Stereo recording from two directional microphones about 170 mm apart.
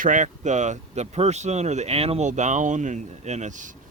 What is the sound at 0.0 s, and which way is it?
Speech, 50° right (ahead or behind).